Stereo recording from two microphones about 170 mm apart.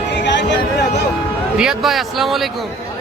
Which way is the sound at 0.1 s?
90° left.